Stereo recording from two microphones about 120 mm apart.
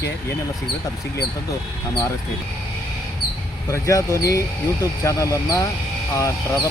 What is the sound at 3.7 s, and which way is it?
Speech, 25° left (ahead or behind).